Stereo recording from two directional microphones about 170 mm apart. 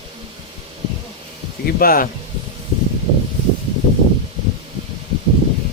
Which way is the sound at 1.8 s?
60° left (ahead or behind).